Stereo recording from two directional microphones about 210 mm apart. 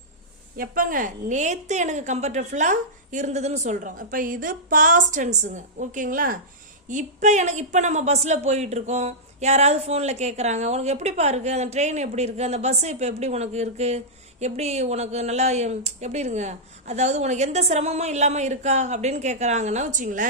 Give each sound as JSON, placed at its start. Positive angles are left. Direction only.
{"t": 0.5, "sound": "speech", "side_deg": -45}